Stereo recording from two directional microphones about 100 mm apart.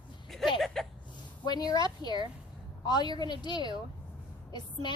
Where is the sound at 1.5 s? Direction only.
40° left (ahead or behind).